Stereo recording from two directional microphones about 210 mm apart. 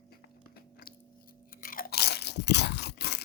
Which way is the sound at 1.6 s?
40° left (ahead or behind).